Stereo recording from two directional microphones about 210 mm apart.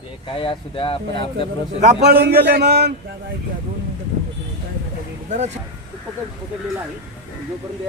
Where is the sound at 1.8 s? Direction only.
35° right (ahead or behind).